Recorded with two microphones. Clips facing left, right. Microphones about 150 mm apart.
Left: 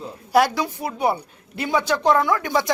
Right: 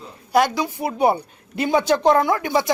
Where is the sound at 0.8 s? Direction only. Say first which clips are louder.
Right 5 dB; 25° right (ahead or behind).